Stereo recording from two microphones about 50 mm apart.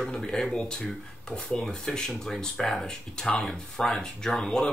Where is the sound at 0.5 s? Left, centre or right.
Centre.